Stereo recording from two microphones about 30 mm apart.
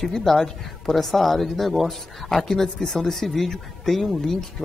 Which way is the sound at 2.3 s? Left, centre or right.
Centre.